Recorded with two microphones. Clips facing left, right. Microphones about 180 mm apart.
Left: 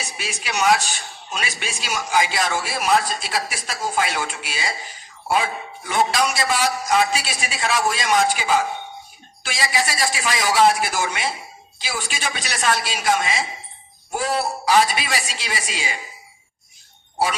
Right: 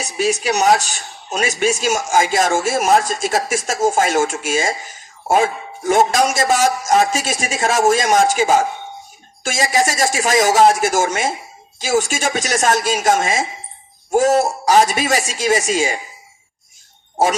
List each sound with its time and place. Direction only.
0.0 s speech: 40° right (ahead or behind)